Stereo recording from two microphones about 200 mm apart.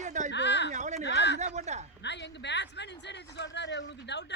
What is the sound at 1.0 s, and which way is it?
Speech, 60° left (ahead or behind).